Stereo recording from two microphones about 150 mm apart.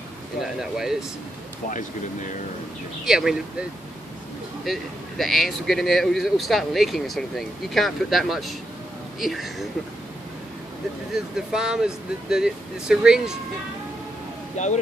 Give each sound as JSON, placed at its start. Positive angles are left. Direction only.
{"t": 0.4, "sound": "speech", "side_deg": 0}
{"t": 3.1, "sound": "speech", "side_deg": -5}
{"t": 4.6, "sound": "speech", "side_deg": 0}
{"t": 11.1, "sound": "speech", "side_deg": -5}
{"t": 14.6, "sound": "speech", "side_deg": 50}